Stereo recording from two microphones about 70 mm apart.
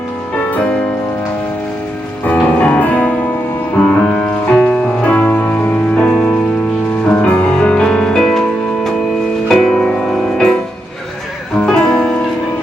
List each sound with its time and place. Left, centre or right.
2.2 s music: left
5.0 s music: centre
11.6 s music: centre